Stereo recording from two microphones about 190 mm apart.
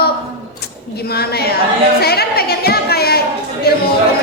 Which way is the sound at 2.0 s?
55° left (ahead or behind).